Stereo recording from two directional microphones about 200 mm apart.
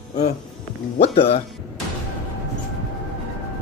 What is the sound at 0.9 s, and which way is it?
Speech, 30° left (ahead or behind).